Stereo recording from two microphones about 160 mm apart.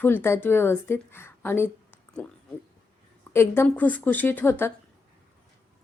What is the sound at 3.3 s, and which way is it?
A woman's voice, 15° left (ahead or behind).